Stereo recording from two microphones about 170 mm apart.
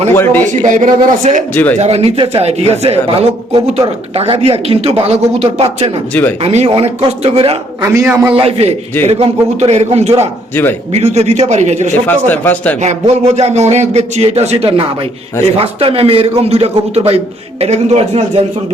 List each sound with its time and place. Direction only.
0.1 s speech: 15° left (ahead or behind)
0.6 s speech: 50° right (ahead or behind)
1.8 s a man's voice: 35° right (ahead or behind)
7.8 s a man's voice: 15° right (ahead or behind)
8.3 s a man's voice: 35° right (ahead or behind)
10.5 s speech: 10° left (ahead or behind)
10.9 s a man's voice: 40° right (ahead or behind)
12.0 s speech: 10° left (ahead or behind)
12.8 s a man's voice: 40° right (ahead or behind)